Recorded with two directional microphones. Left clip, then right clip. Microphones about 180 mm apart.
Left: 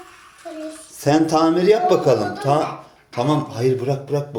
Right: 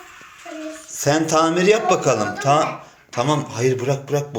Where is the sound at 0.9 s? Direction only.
15° left (ahead or behind).